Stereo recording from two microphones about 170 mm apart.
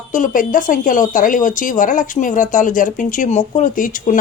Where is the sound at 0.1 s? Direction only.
50° left (ahead or behind).